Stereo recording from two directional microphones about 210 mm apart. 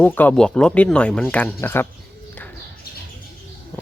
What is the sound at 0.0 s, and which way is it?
Speech, 10° left (ahead or behind).